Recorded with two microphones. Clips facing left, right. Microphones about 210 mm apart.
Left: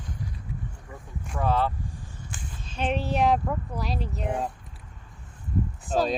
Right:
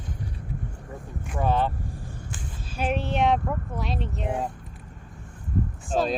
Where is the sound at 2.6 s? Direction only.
5° right (ahead or behind).